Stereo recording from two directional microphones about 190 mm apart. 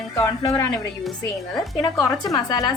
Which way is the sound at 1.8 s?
20° left (ahead or behind).